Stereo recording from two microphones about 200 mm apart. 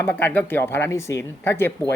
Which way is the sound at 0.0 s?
10° left (ahead or behind).